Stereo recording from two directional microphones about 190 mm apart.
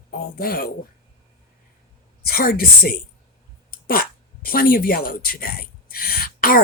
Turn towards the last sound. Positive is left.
turn(degrees=50)  # may be behind; listen again after turning